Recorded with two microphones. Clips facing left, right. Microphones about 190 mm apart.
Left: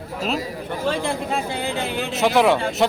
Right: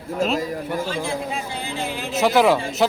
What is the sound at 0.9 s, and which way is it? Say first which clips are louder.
Speech: left 3 dB; 60° left (ahead or behind).